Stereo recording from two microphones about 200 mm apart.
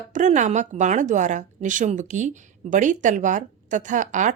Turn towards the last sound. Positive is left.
turn(degrees=-40)  # may be behind; listen again after turning